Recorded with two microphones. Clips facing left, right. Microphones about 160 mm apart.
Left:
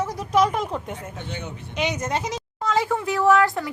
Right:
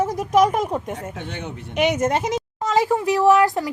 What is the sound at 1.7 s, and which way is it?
Speech, 50° right (ahead or behind).